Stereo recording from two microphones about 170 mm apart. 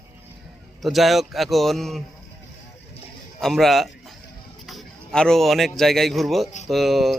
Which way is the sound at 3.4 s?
Centre (ahead or behind).